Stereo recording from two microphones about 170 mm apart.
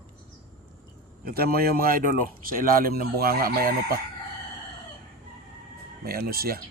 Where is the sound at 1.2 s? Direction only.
60° right (ahead or behind).